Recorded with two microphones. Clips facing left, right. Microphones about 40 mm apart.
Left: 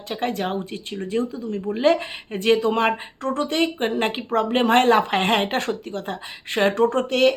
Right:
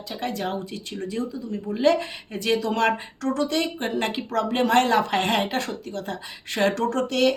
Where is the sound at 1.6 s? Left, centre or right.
Left.